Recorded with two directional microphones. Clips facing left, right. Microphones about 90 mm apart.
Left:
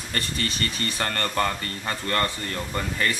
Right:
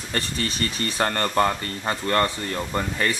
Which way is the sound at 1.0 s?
20° right (ahead or behind).